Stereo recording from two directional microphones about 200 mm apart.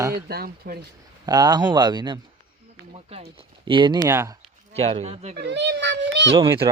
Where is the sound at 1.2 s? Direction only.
20° right (ahead or behind).